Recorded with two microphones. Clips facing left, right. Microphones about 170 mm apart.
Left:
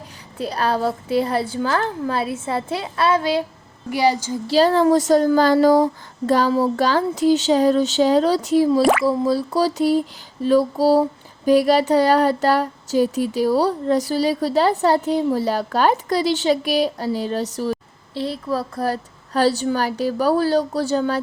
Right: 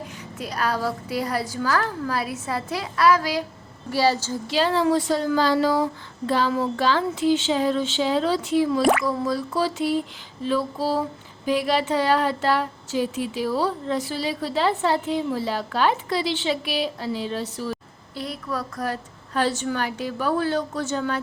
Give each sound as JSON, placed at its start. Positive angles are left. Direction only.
{"t": 0.3, "sound": "a woman's voice", "side_deg": 30}
{"t": 3.8, "sound": "a woman's voice", "side_deg": 15}
{"t": 4.4, "sound": "speech", "side_deg": 40}
{"t": 18.1, "sound": "speech", "side_deg": 30}